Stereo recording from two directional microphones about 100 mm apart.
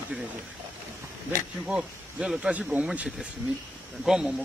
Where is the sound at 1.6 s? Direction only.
10° right (ahead or behind).